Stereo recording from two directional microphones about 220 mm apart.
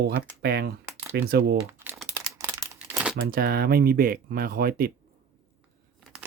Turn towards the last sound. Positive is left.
turn(degrees=0)  # may be behind; listen again after turning